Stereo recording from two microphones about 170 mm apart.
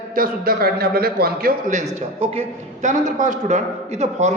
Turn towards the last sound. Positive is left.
turn(degrees=-45)  # may be behind; listen again after turning